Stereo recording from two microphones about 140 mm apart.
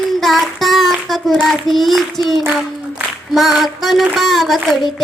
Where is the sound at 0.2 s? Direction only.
Centre (ahead or behind).